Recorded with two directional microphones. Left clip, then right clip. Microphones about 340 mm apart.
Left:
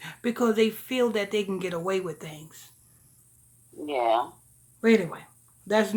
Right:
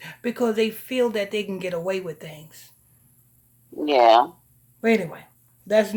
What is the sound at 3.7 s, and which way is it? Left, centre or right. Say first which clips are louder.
Speech: right 10 dB; right.